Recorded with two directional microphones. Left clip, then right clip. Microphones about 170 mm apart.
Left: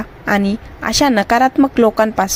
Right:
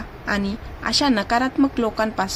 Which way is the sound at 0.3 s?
45° left (ahead or behind).